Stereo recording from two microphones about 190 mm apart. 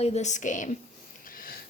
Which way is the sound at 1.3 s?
50° left (ahead or behind).